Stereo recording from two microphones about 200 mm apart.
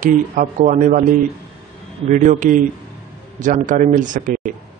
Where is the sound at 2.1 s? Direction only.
40° right (ahead or behind).